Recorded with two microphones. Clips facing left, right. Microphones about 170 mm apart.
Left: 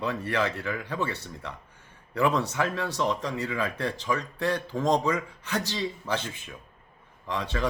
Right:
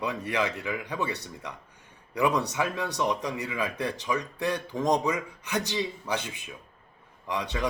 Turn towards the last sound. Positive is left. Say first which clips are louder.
# left 1 dB
turn(degrees=-15)  # may be behind; listen again after turning